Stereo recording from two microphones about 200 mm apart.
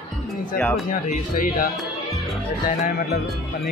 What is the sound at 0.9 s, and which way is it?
Speech, 45° left (ahead or behind).